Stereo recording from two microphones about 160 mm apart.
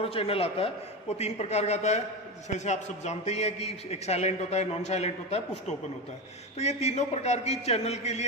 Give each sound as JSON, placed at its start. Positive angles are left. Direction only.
{"t": 0.0, "sound": "a man's voice", "side_deg": 35}